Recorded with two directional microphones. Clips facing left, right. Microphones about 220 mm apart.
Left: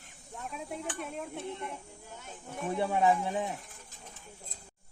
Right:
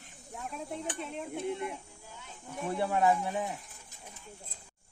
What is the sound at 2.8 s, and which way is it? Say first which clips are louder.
Speech: even; 15° left (ahead or behind).